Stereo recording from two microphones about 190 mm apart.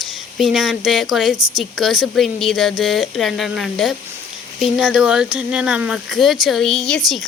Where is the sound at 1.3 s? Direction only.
20° right (ahead or behind).